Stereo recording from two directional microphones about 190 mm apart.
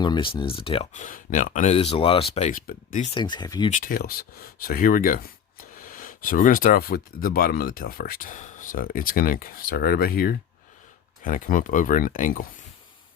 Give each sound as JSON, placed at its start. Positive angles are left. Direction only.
{"t": 0.0, "sound": "speech", "side_deg": 25}
{"t": 1.0, "sound": "speech", "side_deg": 45}
{"t": 3.2, "sound": "speech", "side_deg": 20}
{"t": 3.7, "sound": "speech", "side_deg": 45}